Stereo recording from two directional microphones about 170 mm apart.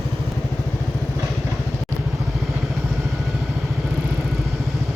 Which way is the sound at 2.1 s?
5° right (ahead or behind).